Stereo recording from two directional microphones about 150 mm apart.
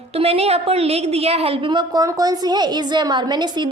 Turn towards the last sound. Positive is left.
turn(degrees=-30)  # may be behind; listen again after turning